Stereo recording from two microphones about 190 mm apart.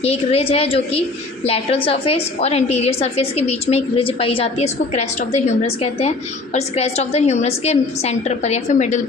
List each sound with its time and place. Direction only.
0.0 s a woman's voice: 30° left (ahead or behind)